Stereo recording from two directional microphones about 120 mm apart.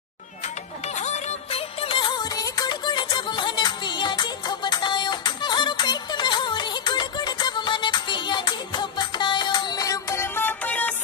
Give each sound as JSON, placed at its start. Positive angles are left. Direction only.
{"t": 1.0, "sound": "music", "side_deg": 60}